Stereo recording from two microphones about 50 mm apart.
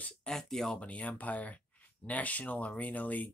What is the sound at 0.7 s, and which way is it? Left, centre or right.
Speech, left.